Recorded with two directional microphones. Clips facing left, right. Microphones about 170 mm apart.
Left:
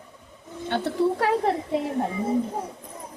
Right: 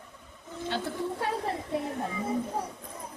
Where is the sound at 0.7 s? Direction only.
75° left (ahead or behind).